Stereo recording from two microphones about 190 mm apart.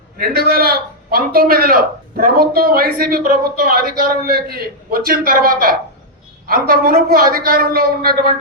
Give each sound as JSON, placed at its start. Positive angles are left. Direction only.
{"t": 0.2, "sound": "a man's voice", "side_deg": -55}